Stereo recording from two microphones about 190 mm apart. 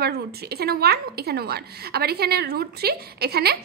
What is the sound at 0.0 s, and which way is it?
A woman's voice, 55° right (ahead or behind).